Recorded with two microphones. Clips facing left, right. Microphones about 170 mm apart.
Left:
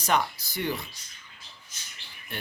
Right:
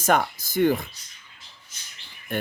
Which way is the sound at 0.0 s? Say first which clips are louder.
Right 4 dB; 50° right (ahead or behind).